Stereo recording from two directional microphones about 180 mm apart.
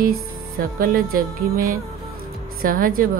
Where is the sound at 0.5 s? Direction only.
50° right (ahead or behind).